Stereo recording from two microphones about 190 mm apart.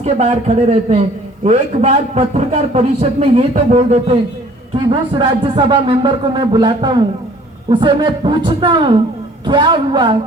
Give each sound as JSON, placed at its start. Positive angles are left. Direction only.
{"t": 0.0, "sound": "a man's voice", "side_deg": -35}
{"t": 4.9, "sound": "speech", "side_deg": -25}